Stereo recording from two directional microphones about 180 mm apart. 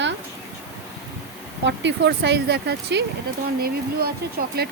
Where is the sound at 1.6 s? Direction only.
75° right (ahead or behind).